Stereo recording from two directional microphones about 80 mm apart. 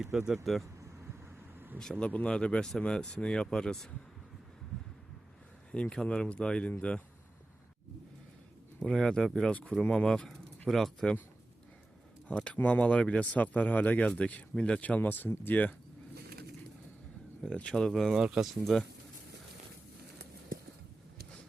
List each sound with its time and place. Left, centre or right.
0.0 s speech: centre
1.5 s vehicle: right
1.8 s speech: centre
5.7 s speech: centre
8.8 s speech: centre
12.5 s speech: centre
17.4 s speech: centre
18.2 s speech: centre
18.6 s speech: centre